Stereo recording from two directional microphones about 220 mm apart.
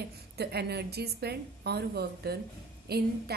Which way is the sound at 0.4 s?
50° right (ahead or behind).